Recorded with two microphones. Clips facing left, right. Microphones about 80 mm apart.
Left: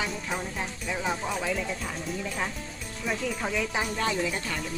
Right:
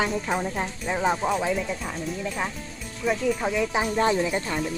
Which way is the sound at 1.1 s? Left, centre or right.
Right.